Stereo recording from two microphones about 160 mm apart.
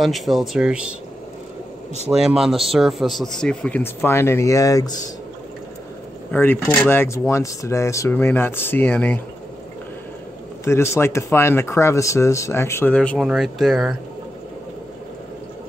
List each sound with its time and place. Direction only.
0.0 s a man's voice: centre (ahead or behind)
2.0 s a man's voice: 5° right (ahead or behind); by 5.1 s 25° left (ahead or behind)
6.3 s speech: 10° left (ahead or behind)
10.6 s a man's voice: 15° left (ahead or behind); by 13.9 s centre (ahead or behind)